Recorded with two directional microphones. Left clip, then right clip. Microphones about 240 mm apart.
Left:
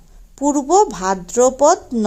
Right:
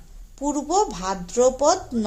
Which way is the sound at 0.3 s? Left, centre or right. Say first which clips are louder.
Left 8 dB; left.